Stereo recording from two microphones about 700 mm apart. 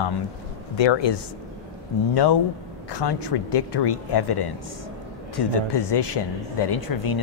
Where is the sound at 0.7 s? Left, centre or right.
Left.